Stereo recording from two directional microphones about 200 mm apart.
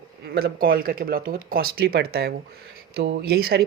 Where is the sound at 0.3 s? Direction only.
50° right (ahead or behind).